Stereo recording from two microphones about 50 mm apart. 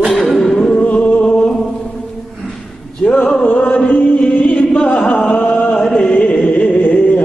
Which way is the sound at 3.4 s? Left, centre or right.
Left.